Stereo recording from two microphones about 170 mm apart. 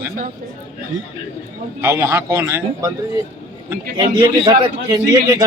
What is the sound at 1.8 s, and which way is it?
Speech, 15° right (ahead or behind).